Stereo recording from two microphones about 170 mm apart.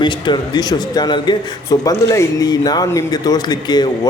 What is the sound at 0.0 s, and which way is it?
A man's voice, 25° left (ahead or behind).